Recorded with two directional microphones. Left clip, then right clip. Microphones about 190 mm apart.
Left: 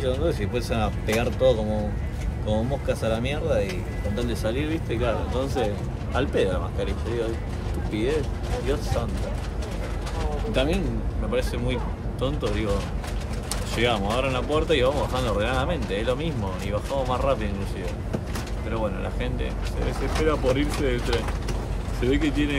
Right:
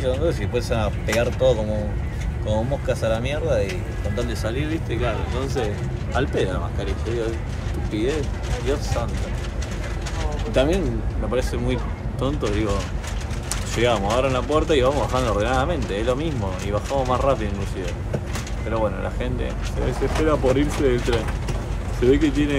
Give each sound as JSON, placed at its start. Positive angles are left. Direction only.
{"t": 0.0, "sound": "speech", "side_deg": 10}
{"t": 10.5, "sound": "speech", "side_deg": 5}
{"t": 13.7, "sound": "speech", "side_deg": 10}
{"t": 18.7, "sound": "speech", "side_deg": 10}